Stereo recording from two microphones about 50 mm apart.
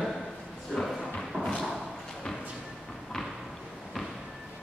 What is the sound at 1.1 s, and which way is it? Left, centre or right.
Thump, centre.